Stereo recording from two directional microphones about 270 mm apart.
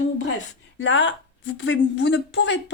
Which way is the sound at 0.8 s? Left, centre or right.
Left.